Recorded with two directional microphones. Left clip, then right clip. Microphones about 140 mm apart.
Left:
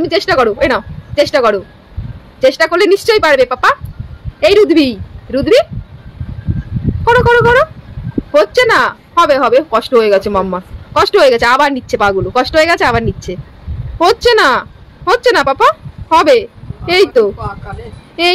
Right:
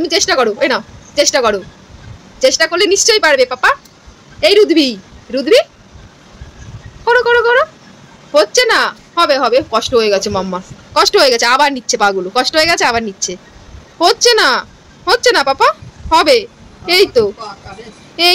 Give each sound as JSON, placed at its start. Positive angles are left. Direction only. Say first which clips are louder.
{"t": 0.0, "sound": "speech", "louder": "left 1 dB", "side_deg": 15}
{"t": 7.1, "sound": "speech", "louder": "left 2 dB", "side_deg": 20}